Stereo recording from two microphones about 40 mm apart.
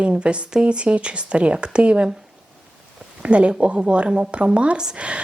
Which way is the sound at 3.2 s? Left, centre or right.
Right.